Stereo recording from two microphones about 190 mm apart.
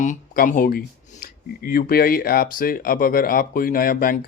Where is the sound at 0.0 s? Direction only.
40° left (ahead or behind).